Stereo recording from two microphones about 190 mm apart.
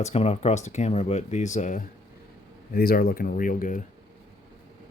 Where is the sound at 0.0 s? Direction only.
35° left (ahead or behind).